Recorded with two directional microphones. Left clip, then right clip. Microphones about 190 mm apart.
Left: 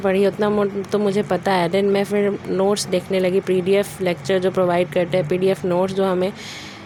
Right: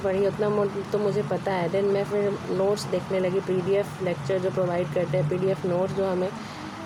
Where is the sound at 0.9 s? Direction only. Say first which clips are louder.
Left 6 dB; 80° left.